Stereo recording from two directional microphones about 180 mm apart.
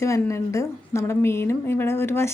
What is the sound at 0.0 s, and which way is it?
A woman's voice, 15° left (ahead or behind).